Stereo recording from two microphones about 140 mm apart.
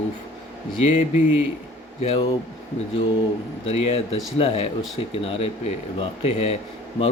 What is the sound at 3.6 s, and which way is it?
Speech, 50° left (ahead or behind).